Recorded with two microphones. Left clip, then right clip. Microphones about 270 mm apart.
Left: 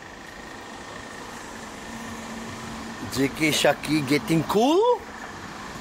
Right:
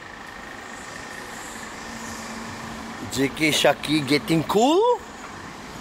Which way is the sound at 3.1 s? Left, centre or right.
Centre.